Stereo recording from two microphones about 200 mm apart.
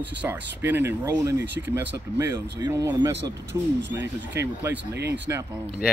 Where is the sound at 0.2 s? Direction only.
10° right (ahead or behind).